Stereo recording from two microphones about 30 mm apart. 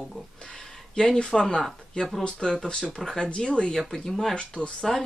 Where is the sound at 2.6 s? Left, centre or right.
Left.